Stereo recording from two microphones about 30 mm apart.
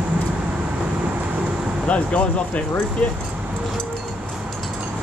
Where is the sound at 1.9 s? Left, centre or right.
Left.